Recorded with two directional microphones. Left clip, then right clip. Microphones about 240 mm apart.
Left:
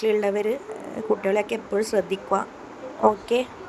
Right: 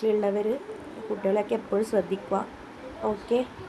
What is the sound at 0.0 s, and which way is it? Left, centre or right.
A woman's voice, left.